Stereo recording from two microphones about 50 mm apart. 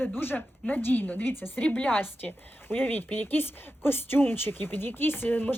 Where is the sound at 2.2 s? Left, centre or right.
Left.